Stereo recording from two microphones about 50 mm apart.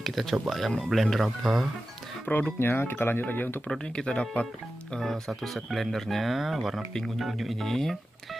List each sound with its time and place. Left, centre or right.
0.0 s speech: centre
2.2 s speech: left
3.7 s speech: centre
5.3 s speech: centre